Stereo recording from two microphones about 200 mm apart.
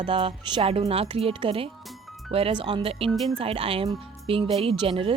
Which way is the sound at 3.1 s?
Centre (ahead or behind).